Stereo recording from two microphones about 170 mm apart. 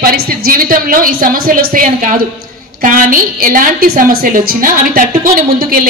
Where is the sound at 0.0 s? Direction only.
60° right (ahead or behind).